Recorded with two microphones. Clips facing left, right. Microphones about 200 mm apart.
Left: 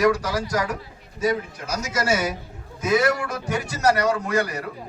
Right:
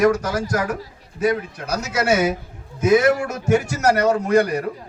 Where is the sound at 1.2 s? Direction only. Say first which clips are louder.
Right 3 dB; 60° right (ahead or behind).